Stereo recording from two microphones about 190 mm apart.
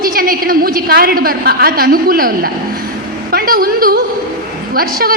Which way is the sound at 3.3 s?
50° right (ahead or behind).